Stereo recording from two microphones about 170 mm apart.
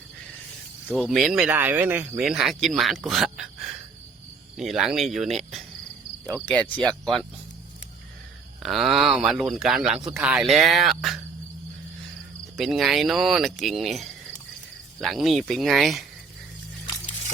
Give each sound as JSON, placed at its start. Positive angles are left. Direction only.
{"t": 0.9, "sound": "speech", "side_deg": 5}
{"t": 6.3, "sound": "cricket", "side_deg": 10}
{"t": 7.0, "sound": "speech", "side_deg": 0}
{"t": 8.6, "sound": "speech", "side_deg": 0}
{"t": 12.5, "sound": "speech", "side_deg": 0}